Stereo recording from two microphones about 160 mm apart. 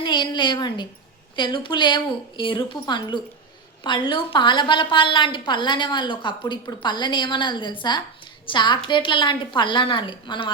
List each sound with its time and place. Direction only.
0.0 s a woman's voice: 30° left (ahead or behind)